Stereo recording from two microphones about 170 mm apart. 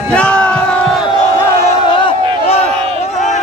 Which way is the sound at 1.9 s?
30° left (ahead or behind).